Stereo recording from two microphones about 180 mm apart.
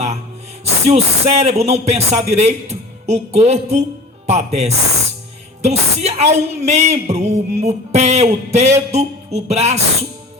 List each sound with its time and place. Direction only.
0.6 s speech: 35° right (ahead or behind)